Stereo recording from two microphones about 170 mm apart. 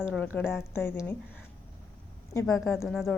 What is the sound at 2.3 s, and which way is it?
Speech, 15° left (ahead or behind).